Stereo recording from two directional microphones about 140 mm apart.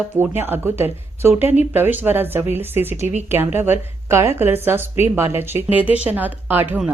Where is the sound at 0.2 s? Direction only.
15° right (ahead or behind).